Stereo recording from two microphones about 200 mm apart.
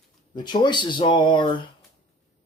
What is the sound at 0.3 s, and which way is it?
Speech, 20° left (ahead or behind).